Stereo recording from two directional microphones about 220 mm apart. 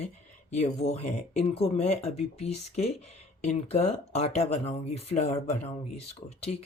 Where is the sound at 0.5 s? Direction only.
30° left (ahead or behind).